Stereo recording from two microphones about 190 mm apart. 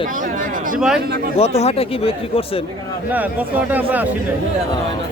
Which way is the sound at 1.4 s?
35° left (ahead or behind).